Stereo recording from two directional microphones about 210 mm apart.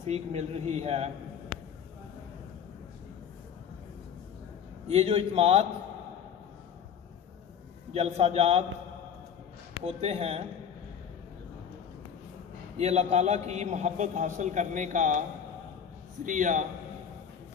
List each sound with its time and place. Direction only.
0.0 s a man's voice: 30° right (ahead or behind)
4.8 s a man's voice: 30° right (ahead or behind)
7.9 s a man's voice: 30° right (ahead or behind)
9.8 s a man's voice: 30° right (ahead or behind)
12.7 s a man's voice: 30° right (ahead or behind)
16.3 s a man's voice: 40° right (ahead or behind)